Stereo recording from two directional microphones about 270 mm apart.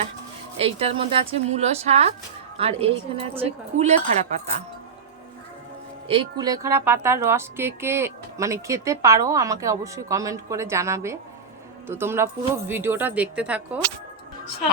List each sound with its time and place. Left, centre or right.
0.5 s speech: right
6.1 s a woman's voice: centre